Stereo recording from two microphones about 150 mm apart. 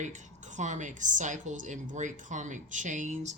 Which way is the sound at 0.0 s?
55° right (ahead or behind).